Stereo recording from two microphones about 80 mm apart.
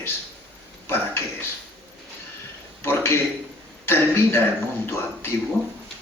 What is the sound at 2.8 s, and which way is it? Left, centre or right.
A man's voice, left.